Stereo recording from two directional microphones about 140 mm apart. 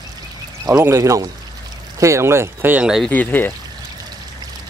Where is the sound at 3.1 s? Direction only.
15° left (ahead or behind).